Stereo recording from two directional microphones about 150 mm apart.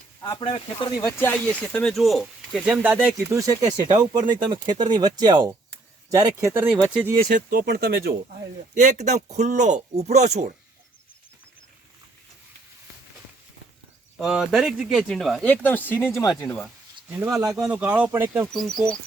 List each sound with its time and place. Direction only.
0.3 s speech: 35° left (ahead or behind)
1.1 s speech: 15° left (ahead or behind); by 3.3 s 5° right (ahead or behind)
3.3 s speech: 20° right (ahead or behind)
7.3 s speech: 90° right
8.7 s speech: 50° right (ahead or behind)
14.2 s speech: 5° right (ahead or behind)
17.1 s speech: 10° right (ahead or behind)
18.5 s speech: centre (ahead or behind)